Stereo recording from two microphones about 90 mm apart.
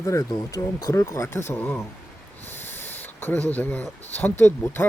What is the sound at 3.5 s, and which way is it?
Speech, 20° left (ahead or behind).